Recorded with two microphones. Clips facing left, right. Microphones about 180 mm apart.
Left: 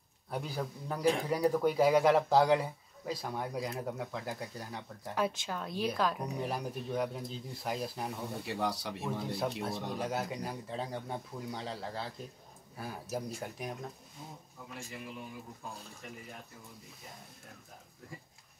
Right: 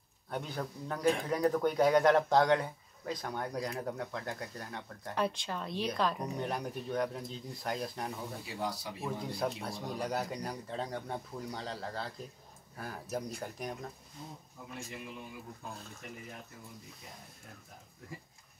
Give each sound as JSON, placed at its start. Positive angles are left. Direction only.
{"t": 0.3, "sound": "speech", "side_deg": 0}
{"t": 8.5, "sound": "speech", "side_deg": 70}
{"t": 9.0, "sound": "speech", "side_deg": 0}